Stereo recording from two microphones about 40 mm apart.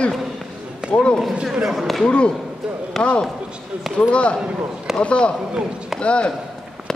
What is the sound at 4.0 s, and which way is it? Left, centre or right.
Speech, left.